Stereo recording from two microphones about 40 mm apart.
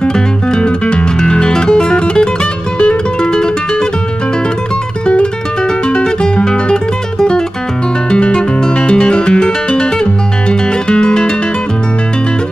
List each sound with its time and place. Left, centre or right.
0.0 s music: left
5.0 s music: left